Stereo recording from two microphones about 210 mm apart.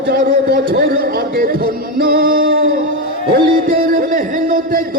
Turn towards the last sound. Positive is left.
turn(degrees=-40)  # may be behind; listen again after turning